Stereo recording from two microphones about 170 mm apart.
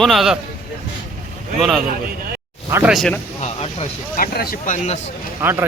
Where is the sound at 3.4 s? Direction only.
40° left (ahead or behind).